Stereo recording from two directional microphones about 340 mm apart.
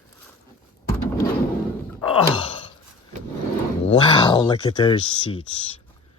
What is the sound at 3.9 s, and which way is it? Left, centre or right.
Speech, centre.